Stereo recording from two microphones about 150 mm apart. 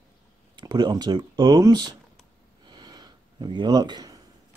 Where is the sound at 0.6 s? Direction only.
30° right (ahead or behind).